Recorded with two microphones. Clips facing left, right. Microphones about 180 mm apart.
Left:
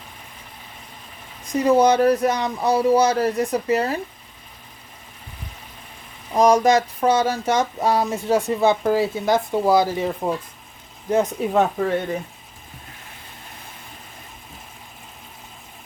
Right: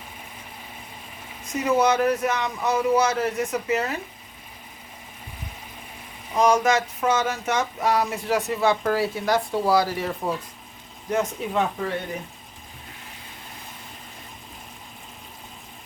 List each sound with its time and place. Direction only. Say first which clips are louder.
1.5 s speech: left 5 dB; 35° left (ahead or behind)
6.3 s a sound: left 4 dB; 35° left (ahead or behind)
11.4 s speech: left 6 dB; 40° left (ahead or behind)